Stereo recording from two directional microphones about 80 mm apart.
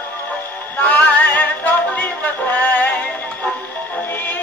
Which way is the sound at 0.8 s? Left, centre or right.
Left.